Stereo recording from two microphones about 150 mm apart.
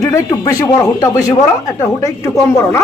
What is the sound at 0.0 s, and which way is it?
Speech, 20° left (ahead or behind).